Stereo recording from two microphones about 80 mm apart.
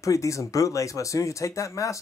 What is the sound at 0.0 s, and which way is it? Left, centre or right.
Speech, left.